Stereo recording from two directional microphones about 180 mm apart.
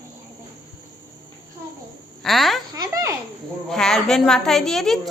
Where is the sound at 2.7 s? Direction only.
20° right (ahead or behind).